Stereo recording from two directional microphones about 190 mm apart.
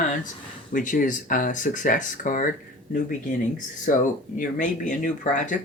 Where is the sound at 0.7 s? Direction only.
45° left (ahead or behind).